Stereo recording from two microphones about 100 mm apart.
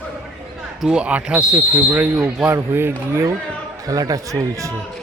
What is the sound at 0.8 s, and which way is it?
Speech, 10° right (ahead or behind).